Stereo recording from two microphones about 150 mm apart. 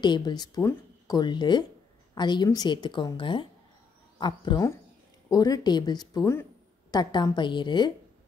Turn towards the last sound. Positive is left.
turn(degrees=30)  # may be behind; listen again after turning